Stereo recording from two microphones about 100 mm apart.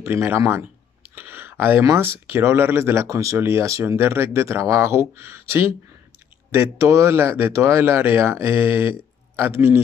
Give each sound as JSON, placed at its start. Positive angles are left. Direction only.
{"t": 0.0, "sound": "speech", "side_deg": -25}